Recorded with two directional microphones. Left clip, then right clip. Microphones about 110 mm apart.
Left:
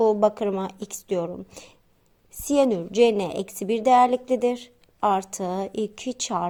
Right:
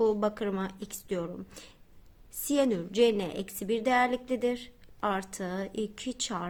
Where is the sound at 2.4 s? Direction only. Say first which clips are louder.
Left 7 dB; 30° left (ahead or behind).